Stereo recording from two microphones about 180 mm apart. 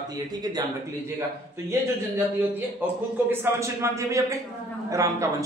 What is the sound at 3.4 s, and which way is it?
A man's voice, 15° right (ahead or behind).